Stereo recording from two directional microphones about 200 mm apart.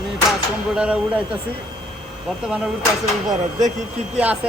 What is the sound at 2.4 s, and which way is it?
Speech, 5° right (ahead or behind).